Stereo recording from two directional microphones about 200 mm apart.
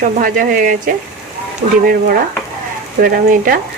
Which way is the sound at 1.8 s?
45° right (ahead or behind).